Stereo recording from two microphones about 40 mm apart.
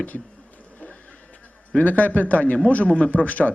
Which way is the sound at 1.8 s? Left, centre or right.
Left.